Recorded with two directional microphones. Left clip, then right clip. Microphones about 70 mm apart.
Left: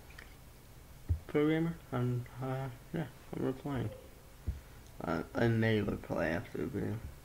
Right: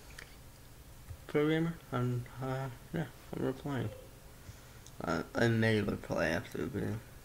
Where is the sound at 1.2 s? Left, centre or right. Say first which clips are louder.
Even; centre.